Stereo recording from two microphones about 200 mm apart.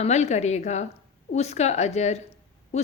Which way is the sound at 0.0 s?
35° left (ahead or behind).